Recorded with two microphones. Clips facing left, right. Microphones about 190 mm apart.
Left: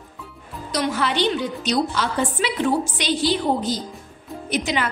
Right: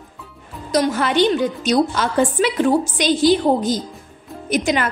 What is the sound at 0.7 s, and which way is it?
A woman's voice, 45° right (ahead or behind).